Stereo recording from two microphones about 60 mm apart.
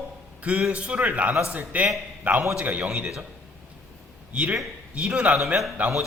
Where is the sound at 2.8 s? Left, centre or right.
Centre.